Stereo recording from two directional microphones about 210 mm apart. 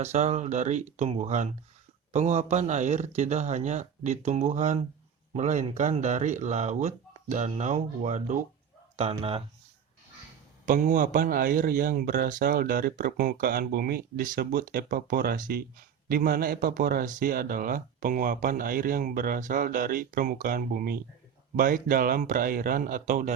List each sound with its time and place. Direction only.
0.0 s a man's voice: 30° right (ahead or behind)
10.7 s a man's voice: 35° right (ahead or behind)